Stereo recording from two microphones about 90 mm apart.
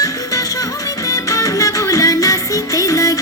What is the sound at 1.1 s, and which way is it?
Music, 40° left (ahead or behind).